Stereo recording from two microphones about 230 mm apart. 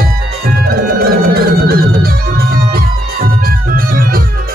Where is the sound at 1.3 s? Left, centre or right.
Right.